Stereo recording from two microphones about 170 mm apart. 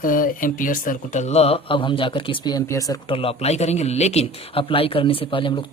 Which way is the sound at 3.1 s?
35° left (ahead or behind).